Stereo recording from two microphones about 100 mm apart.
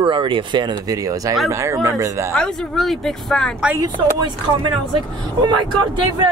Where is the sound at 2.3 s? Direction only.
5° left (ahead or behind).